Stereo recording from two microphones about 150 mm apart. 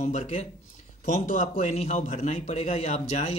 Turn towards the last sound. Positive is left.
turn(degrees=45)  # may be behind; listen again after turning